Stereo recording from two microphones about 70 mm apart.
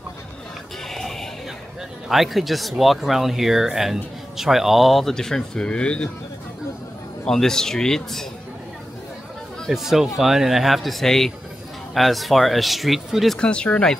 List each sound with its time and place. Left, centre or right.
0.8 s music: centre
2.0 s speech: centre
7.2 s a man's voice: centre
9.7 s speech: centre
13.4 s a man's voice: centre